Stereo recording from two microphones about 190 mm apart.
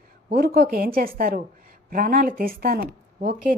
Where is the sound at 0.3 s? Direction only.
55° right (ahead or behind).